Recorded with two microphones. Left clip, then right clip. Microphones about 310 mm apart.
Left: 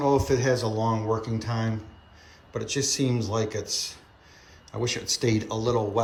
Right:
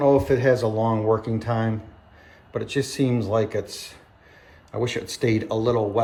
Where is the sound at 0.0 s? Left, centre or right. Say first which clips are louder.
Right 5 dB; centre.